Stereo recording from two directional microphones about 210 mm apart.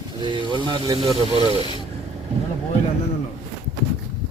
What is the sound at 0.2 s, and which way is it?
Speech, 20° right (ahead or behind).